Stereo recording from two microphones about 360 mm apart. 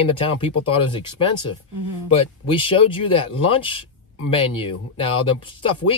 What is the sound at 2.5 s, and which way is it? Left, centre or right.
Speech, centre.